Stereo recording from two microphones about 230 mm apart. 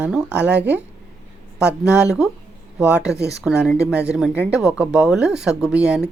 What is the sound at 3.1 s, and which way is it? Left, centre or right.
Speech, right.